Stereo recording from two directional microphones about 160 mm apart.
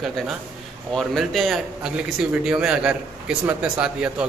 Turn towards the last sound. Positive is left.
turn(degrees=-5)  # may be behind; listen again after turning